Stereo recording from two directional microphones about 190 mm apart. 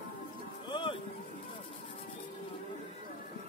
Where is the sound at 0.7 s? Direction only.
25° left (ahead or behind).